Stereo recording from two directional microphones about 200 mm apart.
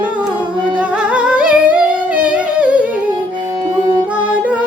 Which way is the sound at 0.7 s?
5° right (ahead or behind).